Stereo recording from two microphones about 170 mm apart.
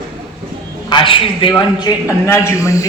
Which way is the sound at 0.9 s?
30° left (ahead or behind).